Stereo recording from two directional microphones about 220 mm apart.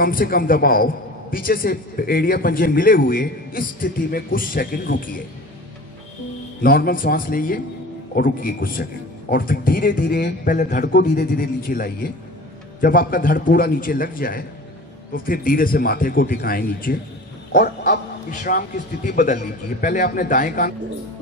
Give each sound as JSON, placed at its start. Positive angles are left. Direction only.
{"t": 0.0, "sound": "a man's voice", "side_deg": 40}
{"t": 6.6, "sound": "a man's voice", "side_deg": 40}
{"t": 17.5, "sound": "a sound", "side_deg": 40}
{"t": 18.3, "sound": "a man's voice", "side_deg": 35}